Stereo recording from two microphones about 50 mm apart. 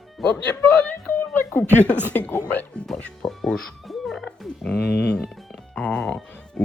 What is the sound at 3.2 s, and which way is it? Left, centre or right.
Speech, centre.